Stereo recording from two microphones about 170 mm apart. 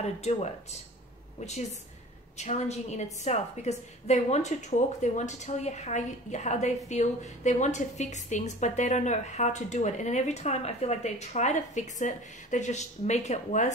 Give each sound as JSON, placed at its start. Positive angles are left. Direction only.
{"t": 0.0, "sound": "a woman's voice", "side_deg": 40}
{"t": 2.3, "sound": "a woman's voice", "side_deg": 40}